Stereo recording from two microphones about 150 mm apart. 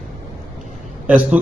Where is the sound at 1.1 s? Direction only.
10° right (ahead or behind).